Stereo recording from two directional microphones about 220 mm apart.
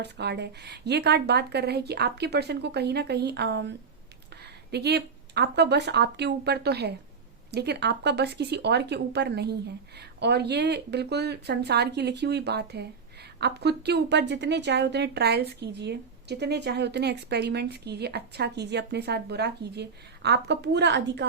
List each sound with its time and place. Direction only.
0.0 s a woman's voice: 50° right (ahead or behind)